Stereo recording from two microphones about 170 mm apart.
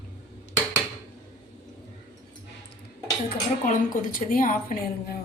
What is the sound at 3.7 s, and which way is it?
A woman's voice, 55° left (ahead or behind).